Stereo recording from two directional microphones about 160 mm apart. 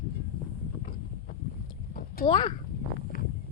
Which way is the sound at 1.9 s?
65° left (ahead or behind).